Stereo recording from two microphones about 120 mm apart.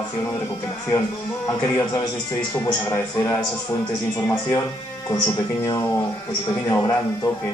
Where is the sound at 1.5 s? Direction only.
25° left (ahead or behind).